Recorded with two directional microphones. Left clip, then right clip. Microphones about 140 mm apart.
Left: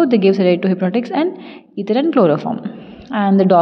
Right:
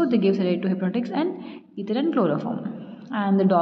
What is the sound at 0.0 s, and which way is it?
A woman's voice, 55° left (ahead or behind).